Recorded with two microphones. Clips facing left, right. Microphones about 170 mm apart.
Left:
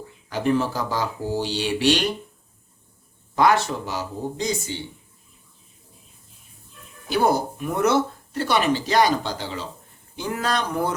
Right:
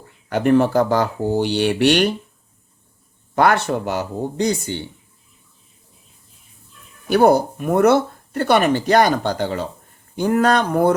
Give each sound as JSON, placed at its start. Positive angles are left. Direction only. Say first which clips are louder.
{"t": 0.3, "sound": "speech", "louder": "right 7 dB", "side_deg": -60}
{"t": 3.3, "sound": "speech", "louder": "right 3 dB", "side_deg": -60}
{"t": 7.1, "sound": "speech", "louder": "right 7 dB", "side_deg": -55}